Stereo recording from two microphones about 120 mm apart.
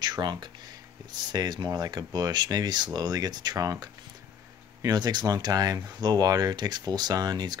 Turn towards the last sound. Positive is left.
turn(degrees=-35)  # may be behind; listen again after turning